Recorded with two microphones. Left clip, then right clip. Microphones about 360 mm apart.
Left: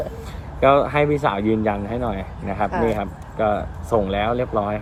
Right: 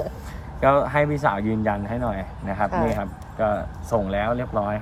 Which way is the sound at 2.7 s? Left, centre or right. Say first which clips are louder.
Left 3 dB; right.